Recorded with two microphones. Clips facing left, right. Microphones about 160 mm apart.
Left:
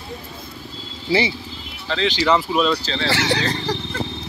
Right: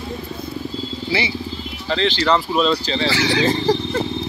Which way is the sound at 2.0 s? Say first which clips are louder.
Even; 10° left (ahead or behind).